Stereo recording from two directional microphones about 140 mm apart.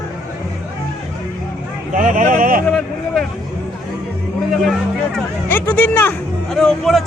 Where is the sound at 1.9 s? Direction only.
70° right (ahead or behind).